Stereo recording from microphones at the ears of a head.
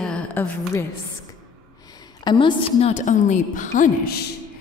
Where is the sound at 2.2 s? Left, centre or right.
Left.